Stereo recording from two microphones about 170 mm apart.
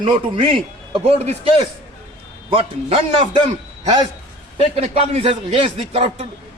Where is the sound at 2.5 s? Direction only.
30° right (ahead or behind).